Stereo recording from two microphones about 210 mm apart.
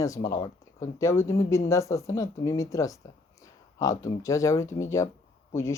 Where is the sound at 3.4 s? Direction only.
15° left (ahead or behind).